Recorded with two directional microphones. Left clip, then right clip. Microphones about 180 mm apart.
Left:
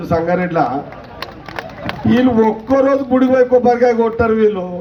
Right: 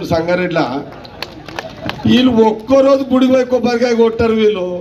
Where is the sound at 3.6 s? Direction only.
45° left (ahead or behind).